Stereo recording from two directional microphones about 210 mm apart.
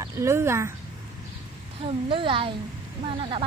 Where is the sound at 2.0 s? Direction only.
25° right (ahead or behind).